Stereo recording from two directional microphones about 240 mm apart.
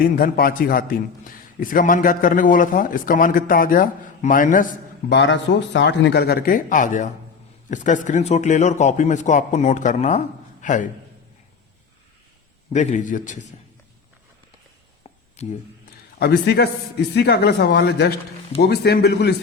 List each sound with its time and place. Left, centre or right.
0.2 s a man's voice: left
12.7 s a man's voice: left
15.4 s speech: left
16.1 s a man's voice: left